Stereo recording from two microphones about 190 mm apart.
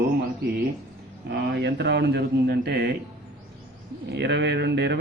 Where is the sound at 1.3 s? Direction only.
65° right (ahead or behind).